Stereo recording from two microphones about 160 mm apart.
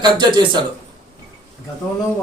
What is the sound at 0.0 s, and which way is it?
Speech, 30° right (ahead or behind).